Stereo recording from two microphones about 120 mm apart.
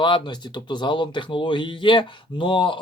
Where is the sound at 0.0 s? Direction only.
40° left (ahead or behind).